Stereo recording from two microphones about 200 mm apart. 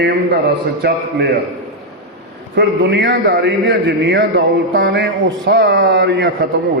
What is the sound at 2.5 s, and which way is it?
A man's voice, 60° right (ahead or behind).